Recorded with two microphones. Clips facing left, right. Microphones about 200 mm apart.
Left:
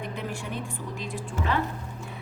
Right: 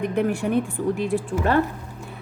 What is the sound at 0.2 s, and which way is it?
Speech, 60° right (ahead or behind).